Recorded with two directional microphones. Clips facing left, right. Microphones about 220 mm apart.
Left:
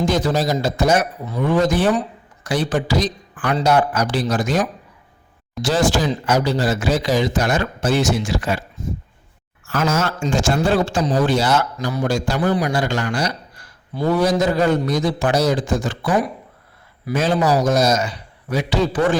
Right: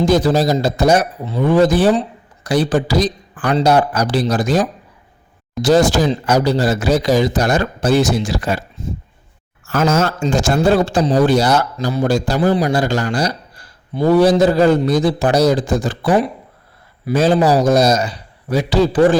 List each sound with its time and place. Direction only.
0.0 s speech: 35° right (ahead or behind)